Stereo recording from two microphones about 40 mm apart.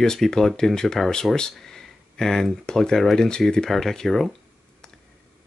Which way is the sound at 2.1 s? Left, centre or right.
Centre.